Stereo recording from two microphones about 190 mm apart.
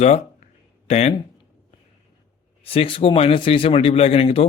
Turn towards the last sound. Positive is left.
turn(degrees=30)  # may be behind; listen again after turning